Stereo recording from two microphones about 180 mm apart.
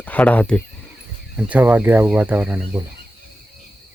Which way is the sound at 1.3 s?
10° right (ahead or behind).